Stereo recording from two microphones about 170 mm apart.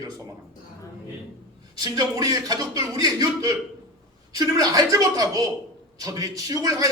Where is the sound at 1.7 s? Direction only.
25° right (ahead or behind).